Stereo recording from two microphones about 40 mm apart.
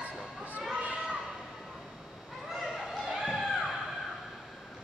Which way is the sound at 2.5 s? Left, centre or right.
Centre.